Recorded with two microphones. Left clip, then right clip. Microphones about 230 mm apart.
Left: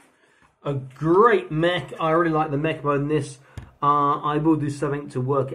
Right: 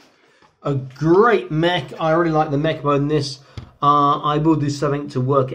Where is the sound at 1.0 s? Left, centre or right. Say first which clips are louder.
Right 2 dB; centre.